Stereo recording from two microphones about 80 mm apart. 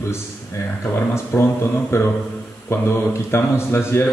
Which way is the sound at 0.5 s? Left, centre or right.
Left.